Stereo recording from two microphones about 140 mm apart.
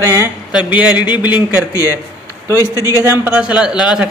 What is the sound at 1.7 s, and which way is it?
Speech, 20° left (ahead or behind).